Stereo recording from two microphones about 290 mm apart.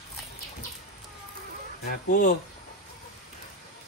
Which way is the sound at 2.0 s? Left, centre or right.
Left.